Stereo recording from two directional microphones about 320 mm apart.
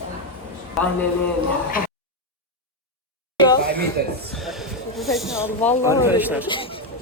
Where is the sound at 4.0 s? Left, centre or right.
Right.